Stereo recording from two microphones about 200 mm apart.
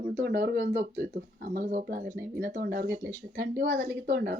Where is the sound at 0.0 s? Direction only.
55° right (ahead or behind).